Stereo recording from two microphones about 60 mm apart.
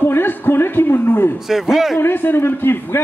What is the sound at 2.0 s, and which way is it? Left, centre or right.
A man's voice, left.